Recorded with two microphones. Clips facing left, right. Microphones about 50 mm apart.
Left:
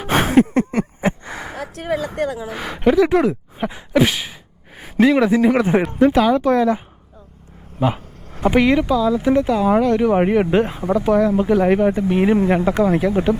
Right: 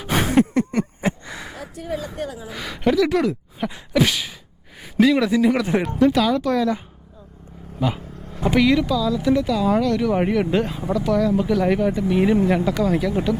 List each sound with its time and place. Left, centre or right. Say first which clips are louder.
0.0 s a sound: left 4 dB; left
1.7 s speech: left 6 dB; left
2.5 s speech: left 2 dB; left
5.1 s speech: left 3 dB; left
7.8 s speech: left 4 dB; left
10.8 s speech: left 4 dB; left
11.0 s speech: left 3 dB; left